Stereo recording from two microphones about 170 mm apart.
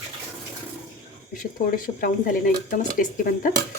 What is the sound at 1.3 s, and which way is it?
Speech, 55° left (ahead or behind).